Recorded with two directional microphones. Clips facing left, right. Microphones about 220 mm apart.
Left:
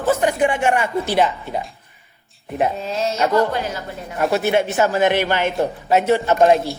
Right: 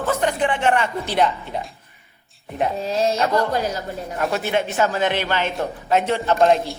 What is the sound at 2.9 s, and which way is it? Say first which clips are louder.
Music: even; 35° right (ahead or behind).